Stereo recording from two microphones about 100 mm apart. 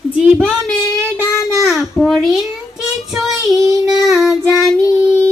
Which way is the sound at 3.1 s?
Centre (ahead or behind).